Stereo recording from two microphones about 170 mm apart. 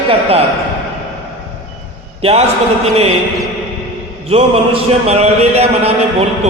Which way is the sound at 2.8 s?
40° right (ahead or behind).